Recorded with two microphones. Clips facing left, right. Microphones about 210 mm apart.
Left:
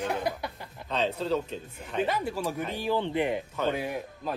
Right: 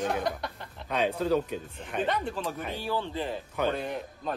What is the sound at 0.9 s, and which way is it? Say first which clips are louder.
Speech: right 2 dB; 15° right (ahead or behind).